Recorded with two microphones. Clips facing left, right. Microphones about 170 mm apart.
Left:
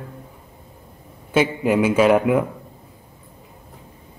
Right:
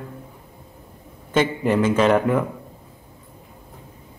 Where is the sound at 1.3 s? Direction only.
10° left (ahead or behind).